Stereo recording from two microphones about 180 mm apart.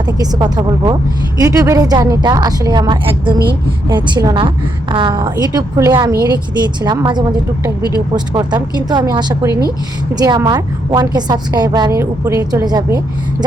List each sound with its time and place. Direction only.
0.2 s a woman's voice: 20° right (ahead or behind)
7.8 s speech: 25° left (ahead or behind)
8.1 s a woman's voice: 25° right (ahead or behind)